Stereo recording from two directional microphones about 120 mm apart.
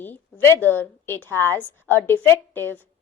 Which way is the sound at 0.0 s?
15° left (ahead or behind).